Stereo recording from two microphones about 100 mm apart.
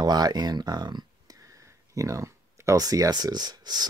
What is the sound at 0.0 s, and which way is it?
Speech, 45° right (ahead or behind).